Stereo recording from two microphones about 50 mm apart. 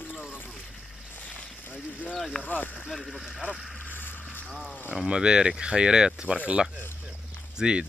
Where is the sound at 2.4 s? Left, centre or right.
Left.